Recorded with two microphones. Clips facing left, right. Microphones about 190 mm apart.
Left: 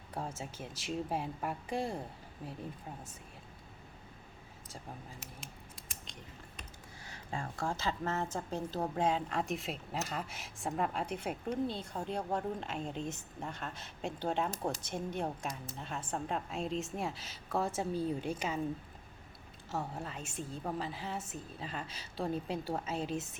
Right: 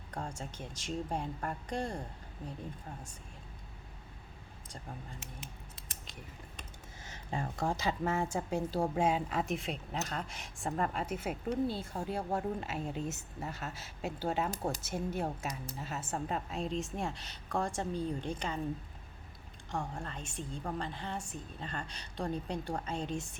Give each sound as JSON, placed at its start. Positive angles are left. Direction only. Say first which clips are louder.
{"t": 0.1, "sound": "a woman's voice", "louder": "left 1 dB", "side_deg": 5}
{"t": 7.0, "sound": "a woman's voice", "louder": "right 3 dB", "side_deg": -20}
{"t": 19.7, "sound": "a woman's voice", "louder": "even", "side_deg": 5}